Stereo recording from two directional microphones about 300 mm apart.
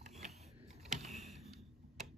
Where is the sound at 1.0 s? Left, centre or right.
Centre.